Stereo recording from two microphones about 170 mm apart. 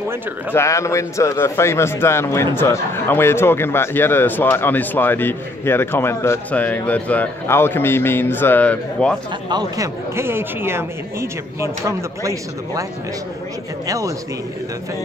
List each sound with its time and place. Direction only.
0.5 s a man's voice: 15° left (ahead or behind)
9.5 s a man's voice: 20° right (ahead or behind)
13.8 s speech: 20° right (ahead or behind)